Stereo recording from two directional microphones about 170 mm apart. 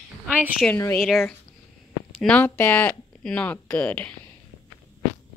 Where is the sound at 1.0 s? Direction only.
Centre (ahead or behind).